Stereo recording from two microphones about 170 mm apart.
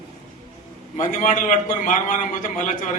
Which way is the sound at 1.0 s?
50° left (ahead or behind).